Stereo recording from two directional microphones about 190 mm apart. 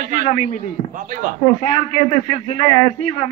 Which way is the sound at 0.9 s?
45° right (ahead or behind).